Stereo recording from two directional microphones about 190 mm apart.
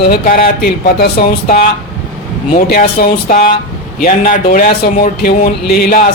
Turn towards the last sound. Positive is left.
turn(degrees=50)  # may be behind; listen again after turning